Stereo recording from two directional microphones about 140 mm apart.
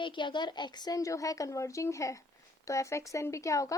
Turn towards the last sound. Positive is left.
turn(degrees=25)  # may be behind; listen again after turning